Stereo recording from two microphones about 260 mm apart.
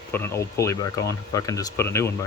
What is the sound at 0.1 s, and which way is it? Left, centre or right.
Speech, centre.